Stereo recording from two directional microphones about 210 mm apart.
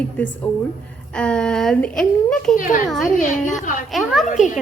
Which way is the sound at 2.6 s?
40° left (ahead or behind).